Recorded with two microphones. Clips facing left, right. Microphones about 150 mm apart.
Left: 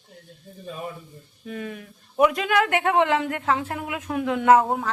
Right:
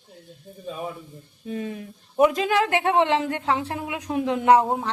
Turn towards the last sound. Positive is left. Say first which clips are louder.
# even
turn(degrees=-20)  # may be behind; listen again after turning